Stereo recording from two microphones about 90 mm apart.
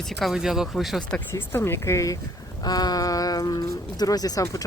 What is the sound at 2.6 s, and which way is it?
Speech, 45° left (ahead or behind).